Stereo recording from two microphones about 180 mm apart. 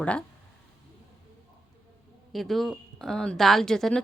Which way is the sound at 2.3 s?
Centre (ahead or behind).